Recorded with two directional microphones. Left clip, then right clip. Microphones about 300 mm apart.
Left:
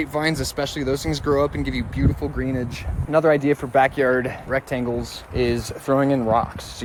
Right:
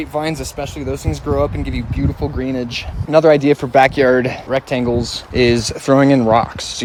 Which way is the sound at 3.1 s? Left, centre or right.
Right.